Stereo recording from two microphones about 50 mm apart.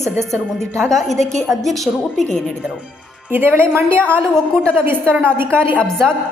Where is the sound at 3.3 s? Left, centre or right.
Right.